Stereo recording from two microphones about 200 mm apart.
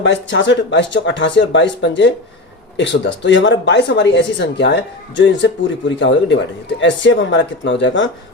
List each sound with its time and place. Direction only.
0.0 s speech: 65° left (ahead or behind)